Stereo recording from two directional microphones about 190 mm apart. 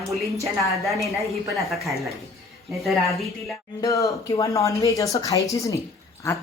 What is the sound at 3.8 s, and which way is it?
Speech, 15° left (ahead or behind).